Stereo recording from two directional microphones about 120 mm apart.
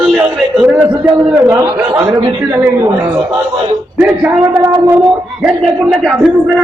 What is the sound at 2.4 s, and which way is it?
Speech, 20° right (ahead or behind).